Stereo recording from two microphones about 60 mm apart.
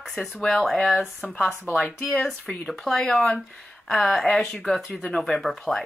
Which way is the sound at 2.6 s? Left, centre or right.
Centre.